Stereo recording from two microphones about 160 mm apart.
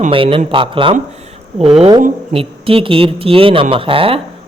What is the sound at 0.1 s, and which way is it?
A man's voice, 35° right (ahead or behind).